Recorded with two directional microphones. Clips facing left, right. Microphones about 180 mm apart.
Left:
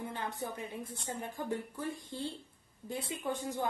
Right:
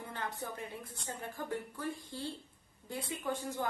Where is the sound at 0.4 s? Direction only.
20° left (ahead or behind).